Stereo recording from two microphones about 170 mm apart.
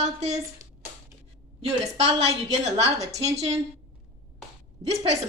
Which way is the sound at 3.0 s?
20° right (ahead or behind).